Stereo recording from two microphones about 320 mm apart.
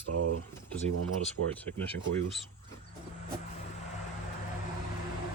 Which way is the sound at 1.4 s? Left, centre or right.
Right.